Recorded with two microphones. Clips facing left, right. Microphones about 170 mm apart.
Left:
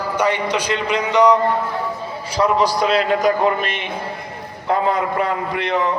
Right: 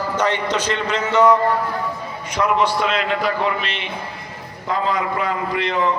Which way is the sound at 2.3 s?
35° left (ahead or behind).